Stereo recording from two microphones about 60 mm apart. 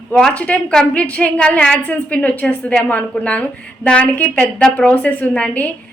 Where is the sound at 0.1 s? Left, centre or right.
Centre.